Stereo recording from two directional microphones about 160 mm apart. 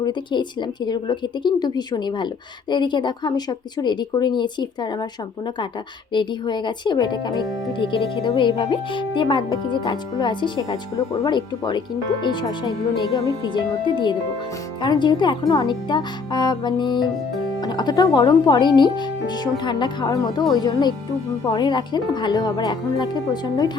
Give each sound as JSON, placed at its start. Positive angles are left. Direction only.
{"t": 0.0, "sound": "a woman's voice", "side_deg": 30}
{"t": 6.1, "sound": "a woman's voice", "side_deg": 30}